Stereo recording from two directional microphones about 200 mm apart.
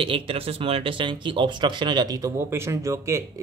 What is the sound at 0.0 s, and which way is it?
Speech, 25° right (ahead or behind).